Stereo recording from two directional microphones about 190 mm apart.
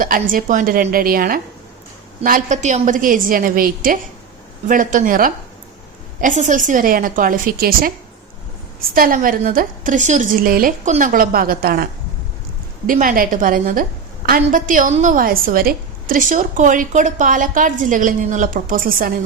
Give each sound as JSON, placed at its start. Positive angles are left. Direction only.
{"t": 0.0, "sound": "a woman's voice", "side_deg": -45}
{"t": 9.0, "sound": "a woman's voice", "side_deg": -50}
{"t": 12.9, "sound": "a woman's voice", "side_deg": -45}